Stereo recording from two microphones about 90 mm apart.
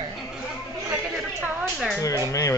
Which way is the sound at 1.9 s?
40° left (ahead or behind).